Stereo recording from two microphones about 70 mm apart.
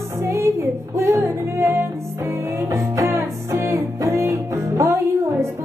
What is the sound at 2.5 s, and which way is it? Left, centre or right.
Music, right.